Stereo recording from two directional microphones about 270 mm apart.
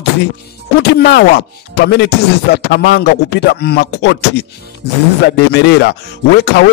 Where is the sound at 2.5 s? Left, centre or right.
Left.